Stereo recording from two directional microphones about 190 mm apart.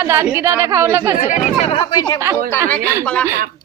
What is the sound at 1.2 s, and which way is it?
Speech, 40° left (ahead or behind).